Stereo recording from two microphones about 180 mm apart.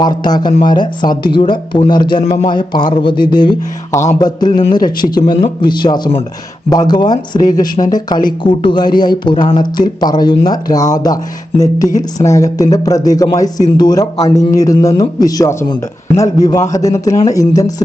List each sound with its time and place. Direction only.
0.0 s speech: 25° left (ahead or behind)
2.2 s speech: 40° left (ahead or behind)
2.5 s speech: 25° left (ahead or behind)
11.9 s speech: 45° left (ahead or behind)
12.3 s speech: 20° left (ahead or behind)